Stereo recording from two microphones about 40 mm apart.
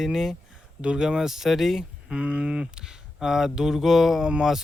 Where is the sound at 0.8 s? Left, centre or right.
Right.